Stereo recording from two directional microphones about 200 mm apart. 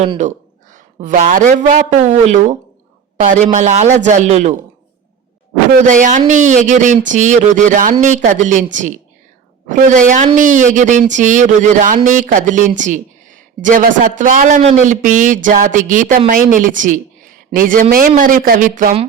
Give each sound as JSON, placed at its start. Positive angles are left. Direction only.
{"t": 0.0, "sound": "speech", "side_deg": -35}
{"t": 5.8, "sound": "speech", "side_deg": -40}